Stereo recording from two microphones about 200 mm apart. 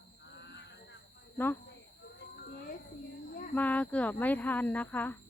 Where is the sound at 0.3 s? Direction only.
60° left (ahead or behind).